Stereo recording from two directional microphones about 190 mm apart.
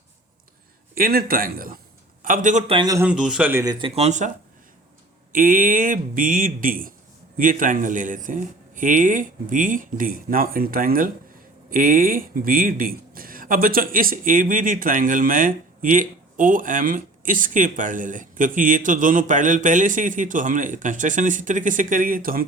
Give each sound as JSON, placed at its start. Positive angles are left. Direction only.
{"t": 0.9, "sound": "a man's voice", "side_deg": -50}
{"t": 2.7, "sound": "speech", "side_deg": -20}
{"t": 3.1, "sound": "speech", "side_deg": -5}
{"t": 5.3, "sound": "speech", "side_deg": -45}